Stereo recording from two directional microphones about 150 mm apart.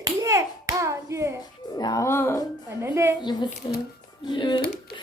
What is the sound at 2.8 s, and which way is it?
Speech, 20° right (ahead or behind).